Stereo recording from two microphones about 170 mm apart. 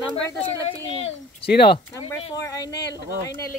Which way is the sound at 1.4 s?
70° left (ahead or behind).